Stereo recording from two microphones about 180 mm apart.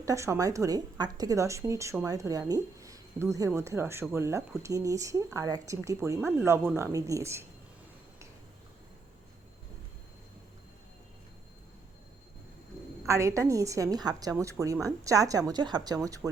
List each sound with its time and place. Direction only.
0.0 s a woman's voice: 15° right (ahead or behind)
13.1 s a woman's voice: 15° right (ahead or behind)